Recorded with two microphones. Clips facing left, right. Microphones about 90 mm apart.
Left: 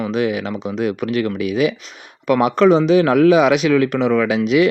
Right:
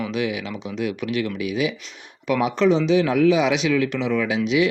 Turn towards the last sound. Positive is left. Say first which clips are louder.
# left 5 dB
turn(degrees=50)  # may be behind; listen again after turning